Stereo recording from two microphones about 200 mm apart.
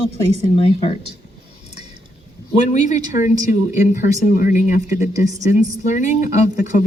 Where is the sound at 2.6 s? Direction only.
35° left (ahead or behind).